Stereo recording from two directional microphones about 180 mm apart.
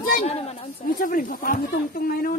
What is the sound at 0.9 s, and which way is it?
Speech, 50° left (ahead or behind).